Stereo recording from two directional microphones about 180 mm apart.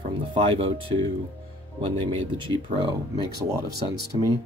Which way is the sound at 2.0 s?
25° right (ahead or behind).